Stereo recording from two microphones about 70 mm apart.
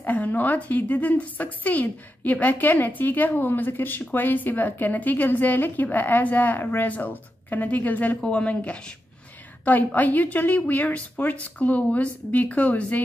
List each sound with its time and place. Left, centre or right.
0.0 s a woman's voice: left
9.9 s a woman's voice: left